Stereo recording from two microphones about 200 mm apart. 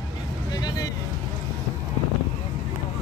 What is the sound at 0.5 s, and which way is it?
Vehicle, 20° left (ahead or behind).